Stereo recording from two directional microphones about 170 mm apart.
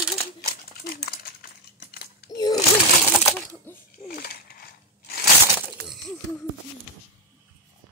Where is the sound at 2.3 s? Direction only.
25° left (ahead or behind).